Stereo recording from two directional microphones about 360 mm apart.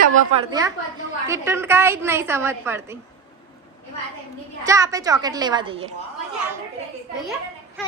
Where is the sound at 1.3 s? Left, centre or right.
Centre.